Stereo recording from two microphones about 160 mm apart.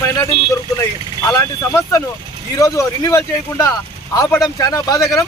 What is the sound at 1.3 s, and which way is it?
Speech, 20° left (ahead or behind).